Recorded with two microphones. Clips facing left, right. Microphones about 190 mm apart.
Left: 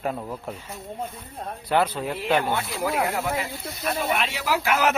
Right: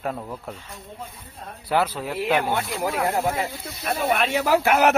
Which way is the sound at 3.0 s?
40° right (ahead or behind).